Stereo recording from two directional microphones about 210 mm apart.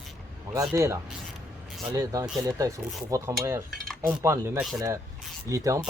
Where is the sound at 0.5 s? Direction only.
15° right (ahead or behind).